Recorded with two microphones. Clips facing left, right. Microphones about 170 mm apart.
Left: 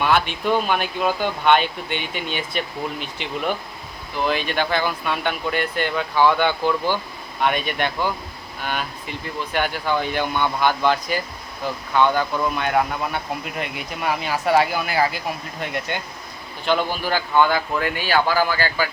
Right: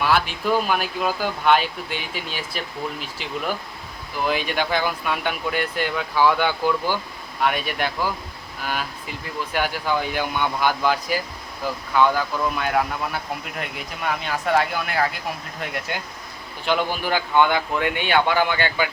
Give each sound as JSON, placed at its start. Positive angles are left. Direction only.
{"t": 0.0, "sound": "speech", "side_deg": -5}
{"t": 16.6, "sound": "a man's voice", "side_deg": -15}